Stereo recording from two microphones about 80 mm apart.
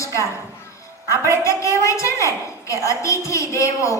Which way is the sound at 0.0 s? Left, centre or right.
Left.